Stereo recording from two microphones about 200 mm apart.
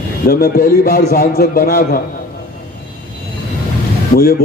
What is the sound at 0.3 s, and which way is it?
A man's voice, 50° left (ahead or behind).